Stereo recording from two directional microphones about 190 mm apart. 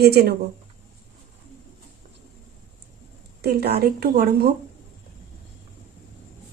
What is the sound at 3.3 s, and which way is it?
Speech, 55° right (ahead or behind).